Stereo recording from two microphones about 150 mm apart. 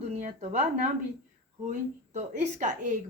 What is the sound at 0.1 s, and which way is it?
Speech, 50° right (ahead or behind).